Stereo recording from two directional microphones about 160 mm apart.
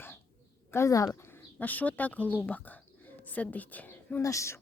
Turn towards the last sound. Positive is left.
turn(degrees=20)  # may be behind; listen again after turning